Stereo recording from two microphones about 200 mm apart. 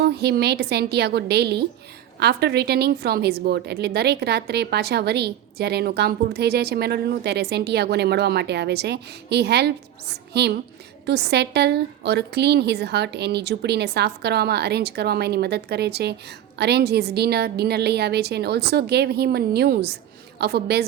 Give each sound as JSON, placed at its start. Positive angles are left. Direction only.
{"t": 0.0, "sound": "a woman's voice", "side_deg": -55}